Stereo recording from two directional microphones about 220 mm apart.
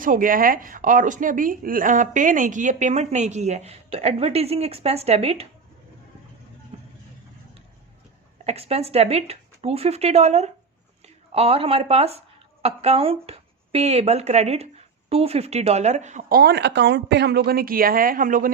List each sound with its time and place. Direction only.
0.0 s speech: 40° right (ahead or behind)
8.4 s speech: 30° right (ahead or behind)